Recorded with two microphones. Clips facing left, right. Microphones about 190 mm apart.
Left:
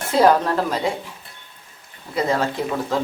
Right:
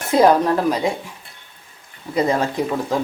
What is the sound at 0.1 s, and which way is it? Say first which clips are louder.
Speech: right 2 dB; 15° right (ahead or behind).